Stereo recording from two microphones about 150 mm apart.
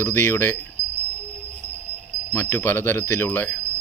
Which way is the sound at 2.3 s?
15° left (ahead or behind).